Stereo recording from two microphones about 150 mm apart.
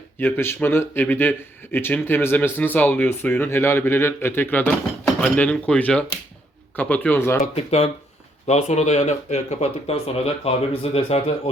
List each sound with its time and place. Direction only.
0.2 s speech: 15° left (ahead or behind)
7.4 s speech: 45° left (ahead or behind)